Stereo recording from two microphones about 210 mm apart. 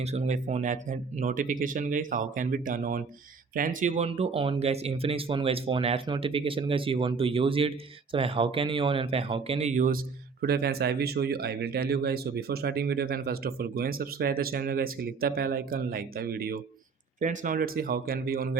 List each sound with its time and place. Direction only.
0.0 s speech: 30° right (ahead or behind)